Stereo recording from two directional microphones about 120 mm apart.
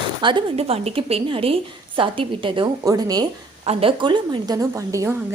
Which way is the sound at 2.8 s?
30° right (ahead or behind).